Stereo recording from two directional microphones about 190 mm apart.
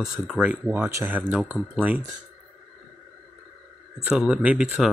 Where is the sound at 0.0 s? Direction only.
5° right (ahead or behind).